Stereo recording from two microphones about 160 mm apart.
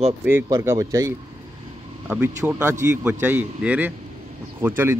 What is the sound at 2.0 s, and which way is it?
Speech, 10° right (ahead or behind).